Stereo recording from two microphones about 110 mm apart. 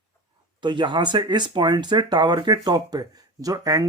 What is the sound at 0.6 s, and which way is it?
Speech, 45° right (ahead or behind).